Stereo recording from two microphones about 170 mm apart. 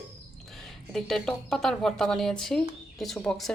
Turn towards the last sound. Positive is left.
turn(degrees=5)  # may be behind; listen again after turning